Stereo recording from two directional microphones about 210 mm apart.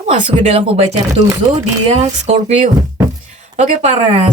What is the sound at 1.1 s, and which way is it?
Speech, 15° right (ahead or behind).